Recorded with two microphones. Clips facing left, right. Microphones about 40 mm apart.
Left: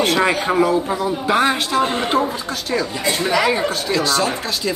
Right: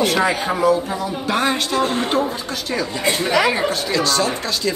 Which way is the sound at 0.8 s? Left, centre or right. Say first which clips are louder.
Left 3 dB; left.